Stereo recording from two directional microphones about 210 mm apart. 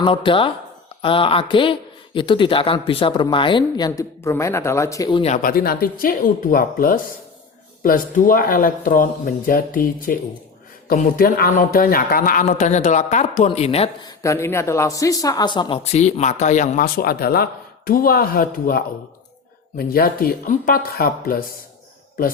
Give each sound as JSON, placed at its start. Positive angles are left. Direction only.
{"t": 0.0, "sound": "speech", "side_deg": 25}
{"t": 5.0, "sound": "speech", "side_deg": 30}
{"t": 14.2, "sound": "speech", "side_deg": 15}